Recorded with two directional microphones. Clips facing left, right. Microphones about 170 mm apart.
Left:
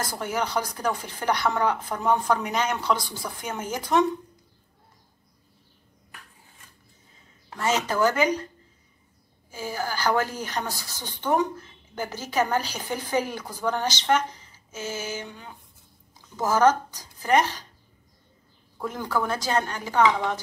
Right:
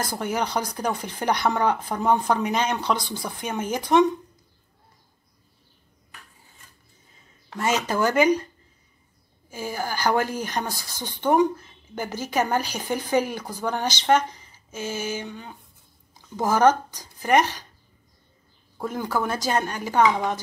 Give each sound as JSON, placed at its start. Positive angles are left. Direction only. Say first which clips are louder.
{"t": 0.1, "sound": "speech", "louder": "right 1 dB", "side_deg": -15}
{"t": 7.5, "sound": "speech", "louder": "right 1 dB", "side_deg": -15}
{"t": 9.5, "sound": "speech", "louder": "right 1 dB", "side_deg": -15}
{"t": 18.8, "sound": "speech", "louder": "right 1 dB", "side_deg": -10}